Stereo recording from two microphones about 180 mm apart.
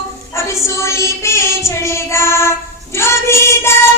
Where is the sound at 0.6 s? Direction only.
15° left (ahead or behind).